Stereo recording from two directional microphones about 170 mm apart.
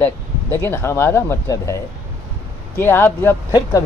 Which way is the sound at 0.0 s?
15° left (ahead or behind).